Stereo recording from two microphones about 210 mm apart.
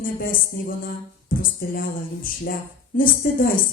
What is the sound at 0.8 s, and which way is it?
A woman's voice, 40° left (ahead or behind).